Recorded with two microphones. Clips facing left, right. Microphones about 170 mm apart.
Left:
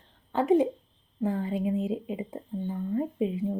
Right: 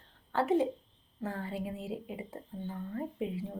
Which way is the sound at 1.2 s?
15° left (ahead or behind).